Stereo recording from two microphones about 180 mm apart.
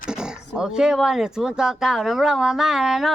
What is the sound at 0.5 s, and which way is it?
Speech, 5° right (ahead or behind).